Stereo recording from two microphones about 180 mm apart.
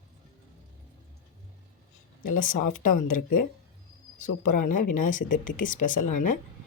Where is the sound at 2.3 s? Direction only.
50° left (ahead or behind).